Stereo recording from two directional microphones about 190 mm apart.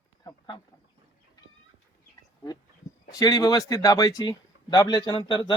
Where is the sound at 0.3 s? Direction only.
20° left (ahead or behind).